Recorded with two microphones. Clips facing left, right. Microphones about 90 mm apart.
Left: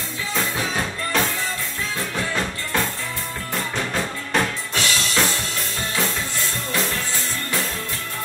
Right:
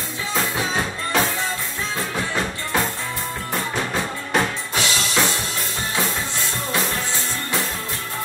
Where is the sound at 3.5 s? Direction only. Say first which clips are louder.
Right 1 dB; 10° right (ahead or behind).